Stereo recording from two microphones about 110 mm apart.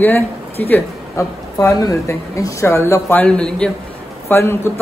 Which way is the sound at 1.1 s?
30° left (ahead or behind).